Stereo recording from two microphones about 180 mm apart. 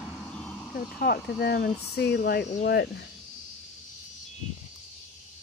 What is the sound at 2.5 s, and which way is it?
Speech, 55° left (ahead or behind).